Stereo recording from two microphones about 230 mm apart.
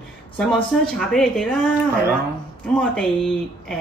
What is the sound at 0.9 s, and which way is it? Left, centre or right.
A woman's voice, centre.